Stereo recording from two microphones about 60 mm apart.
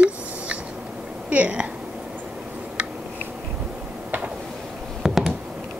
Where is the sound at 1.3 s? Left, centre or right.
Right.